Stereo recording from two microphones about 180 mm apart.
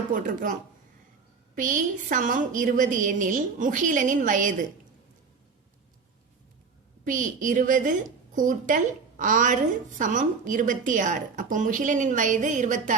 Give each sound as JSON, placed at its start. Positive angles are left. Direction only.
{"t": 0.1, "sound": "a woman's voice", "side_deg": -50}
{"t": 1.5, "sound": "a woman's voice", "side_deg": -45}
{"t": 7.0, "sound": "a woman's voice", "side_deg": -45}